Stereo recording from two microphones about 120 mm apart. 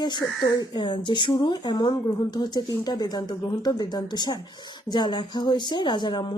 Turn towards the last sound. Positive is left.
turn(degrees=40)  # may be behind; listen again after turning